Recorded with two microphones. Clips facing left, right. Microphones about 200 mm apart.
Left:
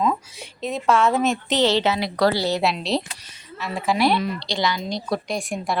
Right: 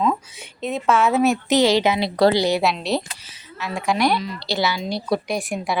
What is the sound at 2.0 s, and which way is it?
Speech, 25° right (ahead or behind).